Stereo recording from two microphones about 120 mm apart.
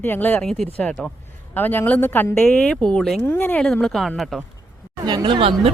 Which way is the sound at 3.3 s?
15° left (ahead or behind).